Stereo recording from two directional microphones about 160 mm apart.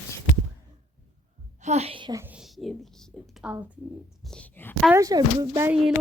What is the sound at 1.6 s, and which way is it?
Speech, 40° right (ahead or behind).